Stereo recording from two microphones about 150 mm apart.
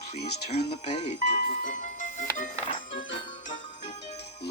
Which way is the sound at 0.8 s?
50° left (ahead or behind).